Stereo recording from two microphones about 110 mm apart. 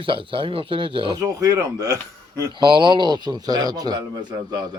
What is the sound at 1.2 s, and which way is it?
Speech, 30° right (ahead or behind).